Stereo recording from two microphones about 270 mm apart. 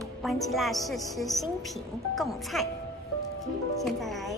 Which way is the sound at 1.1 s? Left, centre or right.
Centre.